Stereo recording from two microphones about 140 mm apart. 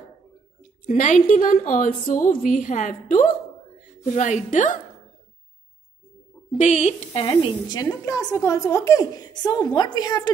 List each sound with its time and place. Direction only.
0.8 s a woman's voice: 65° left (ahead or behind)
6.6 s a woman's voice: 55° left (ahead or behind)
7.2 s a woman's voice: 30° left (ahead or behind)